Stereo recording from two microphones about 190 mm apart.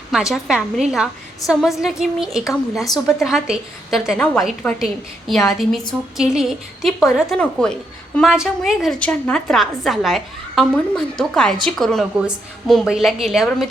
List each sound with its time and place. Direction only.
0.1 s a woman's voice: centre (ahead or behind)